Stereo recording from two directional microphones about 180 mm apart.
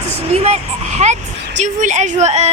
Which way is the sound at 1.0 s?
40° right (ahead or behind).